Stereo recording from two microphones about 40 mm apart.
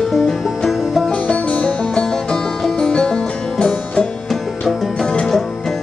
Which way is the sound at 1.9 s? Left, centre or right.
Centre.